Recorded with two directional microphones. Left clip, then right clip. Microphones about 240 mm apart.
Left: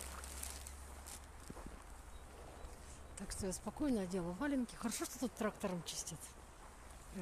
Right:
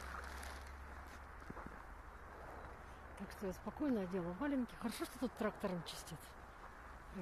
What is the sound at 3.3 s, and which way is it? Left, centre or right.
Speech, centre.